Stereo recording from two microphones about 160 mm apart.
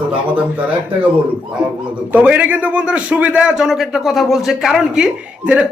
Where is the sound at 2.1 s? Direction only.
10° right (ahead or behind).